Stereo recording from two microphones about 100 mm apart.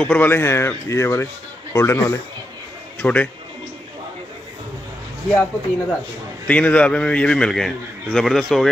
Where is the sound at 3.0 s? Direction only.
15° left (ahead or behind).